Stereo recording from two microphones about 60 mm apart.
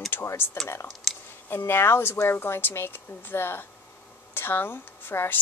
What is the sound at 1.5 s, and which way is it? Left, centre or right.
Speech, left.